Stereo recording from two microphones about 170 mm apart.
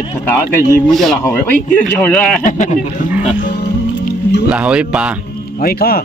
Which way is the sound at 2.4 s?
50° left (ahead or behind).